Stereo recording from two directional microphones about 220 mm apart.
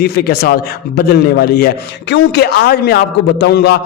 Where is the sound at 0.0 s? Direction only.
45° left (ahead or behind).